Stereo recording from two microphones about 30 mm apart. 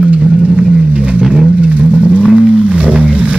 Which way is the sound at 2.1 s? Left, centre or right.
Right.